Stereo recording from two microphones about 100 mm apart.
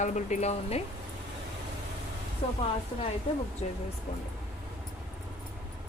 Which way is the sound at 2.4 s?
70° left (ahead or behind).